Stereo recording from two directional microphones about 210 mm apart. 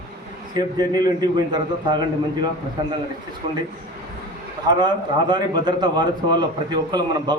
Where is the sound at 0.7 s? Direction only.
20° right (ahead or behind).